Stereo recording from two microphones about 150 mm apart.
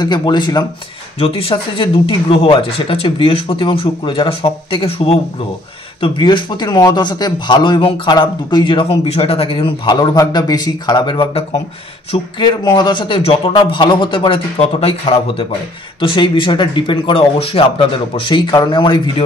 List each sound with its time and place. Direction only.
0.0 s a man's voice: 30° left (ahead or behind)